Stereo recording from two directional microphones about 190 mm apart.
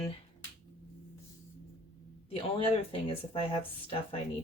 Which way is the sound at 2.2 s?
30° left (ahead or behind).